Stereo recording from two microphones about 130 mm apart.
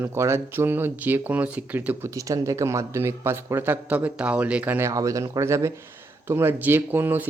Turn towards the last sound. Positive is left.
turn(degrees=-15)  # may be behind; listen again after turning